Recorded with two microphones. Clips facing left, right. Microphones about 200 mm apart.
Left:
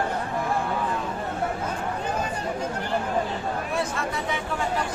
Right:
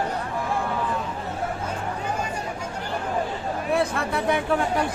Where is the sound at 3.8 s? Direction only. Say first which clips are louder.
Right 3 dB; 60° right (ahead or behind).